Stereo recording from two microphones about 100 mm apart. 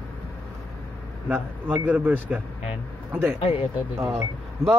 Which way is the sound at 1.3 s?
20° right (ahead or behind).